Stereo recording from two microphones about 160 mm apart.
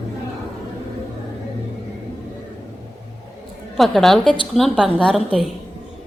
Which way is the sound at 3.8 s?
Centre (ahead or behind).